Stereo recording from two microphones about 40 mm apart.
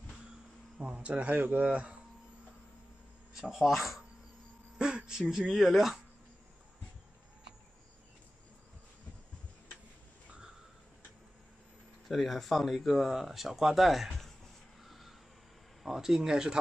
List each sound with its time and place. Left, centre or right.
0.7 s speech: right
3.3 s speech: centre
4.7 s a sound: centre
5.5 s speech: centre
12.1 s speech: centre
14.8 s a sound: centre
15.8 s speech: centre